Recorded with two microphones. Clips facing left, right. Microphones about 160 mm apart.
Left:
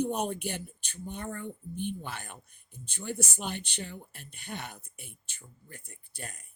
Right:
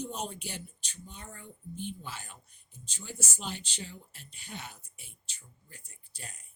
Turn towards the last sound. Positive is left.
turn(degrees=60)  # may be behind; listen again after turning